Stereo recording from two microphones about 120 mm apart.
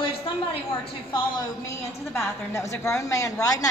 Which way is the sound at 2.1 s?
25° left (ahead or behind).